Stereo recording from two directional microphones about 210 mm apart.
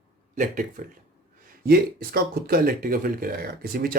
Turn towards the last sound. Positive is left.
turn(degrees=-45)  # may be behind; listen again after turning